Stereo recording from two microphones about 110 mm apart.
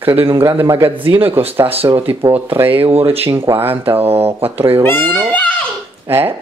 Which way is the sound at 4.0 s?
65° right (ahead or behind).